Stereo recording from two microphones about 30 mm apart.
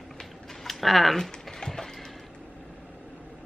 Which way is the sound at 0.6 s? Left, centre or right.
Centre.